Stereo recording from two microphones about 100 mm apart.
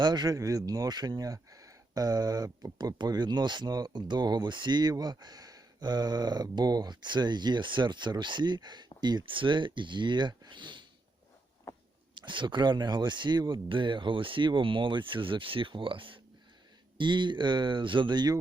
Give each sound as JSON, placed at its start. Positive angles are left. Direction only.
{"t": 0.0, "sound": "speech", "side_deg": -45}
{"t": 12.1, "sound": "speech", "side_deg": -55}